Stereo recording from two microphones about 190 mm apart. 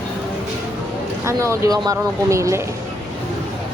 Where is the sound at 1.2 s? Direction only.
15° right (ahead or behind).